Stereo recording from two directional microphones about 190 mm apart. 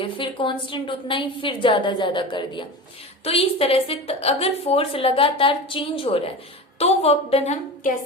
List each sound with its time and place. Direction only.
0.0 s a woman's voice: 25° left (ahead or behind)
3.2 s a woman's voice: 30° left (ahead or behind)